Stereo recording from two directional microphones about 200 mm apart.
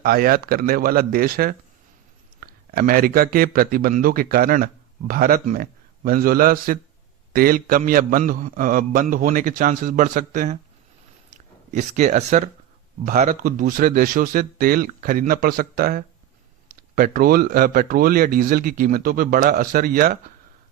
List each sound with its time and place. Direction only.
0.0 s a man's voice: 50° right (ahead or behind)